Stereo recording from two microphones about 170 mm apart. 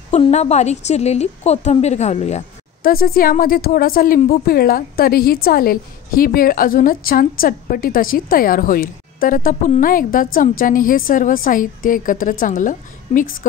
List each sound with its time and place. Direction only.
0.1 s a woman's voice: 40° left (ahead or behind)
2.8 s a woman's voice: 60° left (ahead or behind)